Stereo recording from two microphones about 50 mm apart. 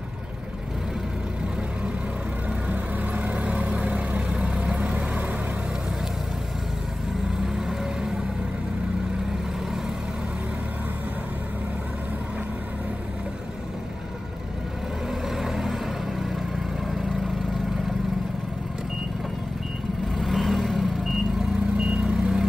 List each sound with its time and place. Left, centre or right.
2.7 s vehicle: right
4.3 s vehicle: centre
7.4 s vehicle: centre
15.2 s vehicle: centre
20.2 s vehicle: centre
21.4 s vehicle: centre